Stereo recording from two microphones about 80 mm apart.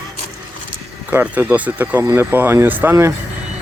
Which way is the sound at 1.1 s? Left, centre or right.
Right.